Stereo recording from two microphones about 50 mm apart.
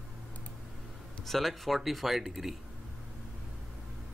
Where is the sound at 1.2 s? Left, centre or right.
Centre.